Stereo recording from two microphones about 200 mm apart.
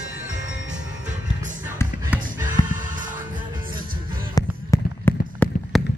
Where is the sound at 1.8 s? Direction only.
15° left (ahead or behind).